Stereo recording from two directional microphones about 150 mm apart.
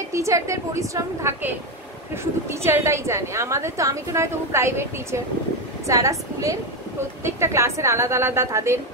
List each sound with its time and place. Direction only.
0.1 s a woman's voice: 20° right (ahead or behind)
2.6 s a woman's voice: 20° right (ahead or behind)